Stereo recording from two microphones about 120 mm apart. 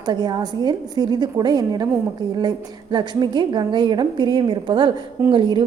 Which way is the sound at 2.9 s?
40° right (ahead or behind).